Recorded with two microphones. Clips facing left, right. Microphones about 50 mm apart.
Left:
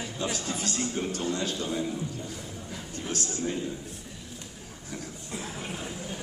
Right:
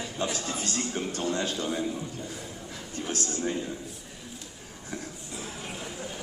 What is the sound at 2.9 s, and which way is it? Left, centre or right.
Speech, right.